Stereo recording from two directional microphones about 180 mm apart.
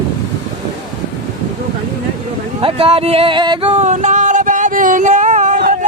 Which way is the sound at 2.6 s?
30° right (ahead or behind).